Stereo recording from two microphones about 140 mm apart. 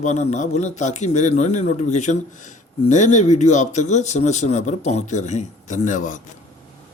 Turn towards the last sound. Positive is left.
turn(degrees=65)  # may be behind; listen again after turning